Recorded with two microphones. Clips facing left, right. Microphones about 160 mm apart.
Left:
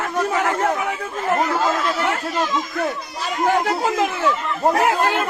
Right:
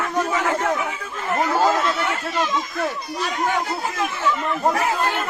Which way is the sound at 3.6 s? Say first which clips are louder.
Left 6 dB; 90° left.